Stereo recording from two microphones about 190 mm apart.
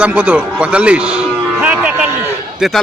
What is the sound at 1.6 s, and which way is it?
Music, 10° right (ahead or behind).